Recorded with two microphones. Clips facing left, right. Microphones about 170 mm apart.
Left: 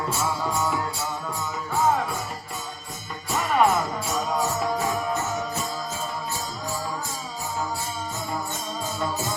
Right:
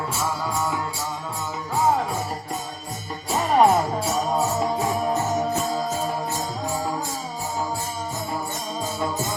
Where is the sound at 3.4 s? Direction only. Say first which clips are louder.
Right 4 dB; 35° right (ahead or behind).